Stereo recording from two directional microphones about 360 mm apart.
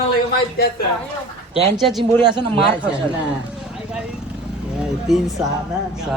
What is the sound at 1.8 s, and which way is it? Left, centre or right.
Speech, centre.